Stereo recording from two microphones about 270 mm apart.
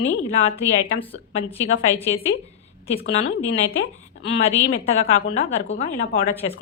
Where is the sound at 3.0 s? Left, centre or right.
Left.